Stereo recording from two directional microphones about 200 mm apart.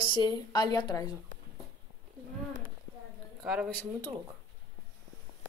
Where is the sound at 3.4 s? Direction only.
5° right (ahead or behind).